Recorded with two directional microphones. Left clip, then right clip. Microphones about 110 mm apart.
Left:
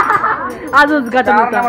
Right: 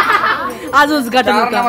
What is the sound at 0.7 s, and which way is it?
Speech, 25° right (ahead or behind).